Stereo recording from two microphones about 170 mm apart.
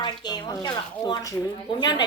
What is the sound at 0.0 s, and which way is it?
A woman's voice, 25° left (ahead or behind).